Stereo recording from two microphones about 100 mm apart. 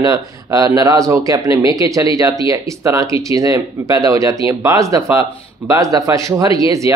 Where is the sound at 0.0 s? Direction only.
35° right (ahead or behind).